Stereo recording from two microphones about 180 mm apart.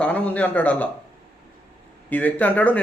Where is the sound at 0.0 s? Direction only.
10° left (ahead or behind).